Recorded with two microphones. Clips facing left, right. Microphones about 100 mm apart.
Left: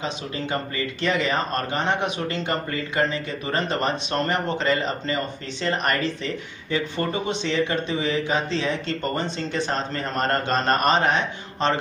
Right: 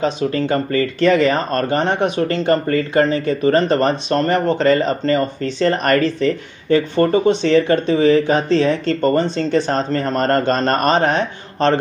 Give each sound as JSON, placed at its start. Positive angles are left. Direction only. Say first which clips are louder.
{"t": 0.0, "sound": "speech", "louder": "right 11 dB", "side_deg": -45}